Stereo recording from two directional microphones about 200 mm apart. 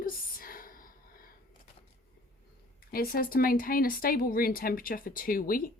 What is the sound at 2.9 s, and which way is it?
Speech, 45° left (ahead or behind).